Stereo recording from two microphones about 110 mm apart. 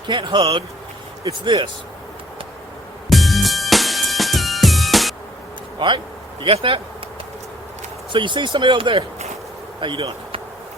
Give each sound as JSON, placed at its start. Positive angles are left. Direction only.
{"t": 0.1, "sound": "speech", "side_deg": -45}
{"t": 3.1, "sound": "music", "side_deg": 0}
{"t": 6.4, "sound": "a man's voice", "side_deg": -55}
{"t": 8.1, "sound": "speech", "side_deg": -45}